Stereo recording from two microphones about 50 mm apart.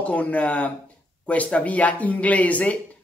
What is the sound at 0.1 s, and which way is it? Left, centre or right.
Speech, left.